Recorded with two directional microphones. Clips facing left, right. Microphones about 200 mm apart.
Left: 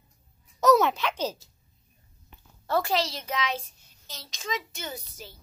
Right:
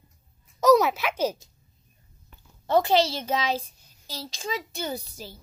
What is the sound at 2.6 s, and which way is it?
A woman's voice, 20° right (ahead or behind).